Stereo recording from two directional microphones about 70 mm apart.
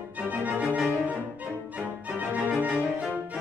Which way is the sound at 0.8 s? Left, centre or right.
Right.